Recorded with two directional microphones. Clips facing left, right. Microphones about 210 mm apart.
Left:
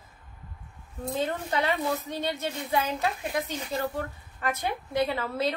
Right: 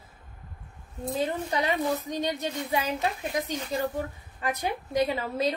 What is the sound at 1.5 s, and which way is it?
A woman's voice, 15° right (ahead or behind).